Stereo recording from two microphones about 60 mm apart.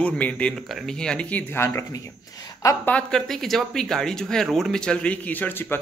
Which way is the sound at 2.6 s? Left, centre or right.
Left.